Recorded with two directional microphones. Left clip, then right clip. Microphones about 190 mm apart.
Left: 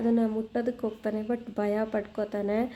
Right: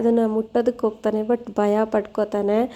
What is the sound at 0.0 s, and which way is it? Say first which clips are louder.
Speech: right 8 dB; 25° right (ahead or behind).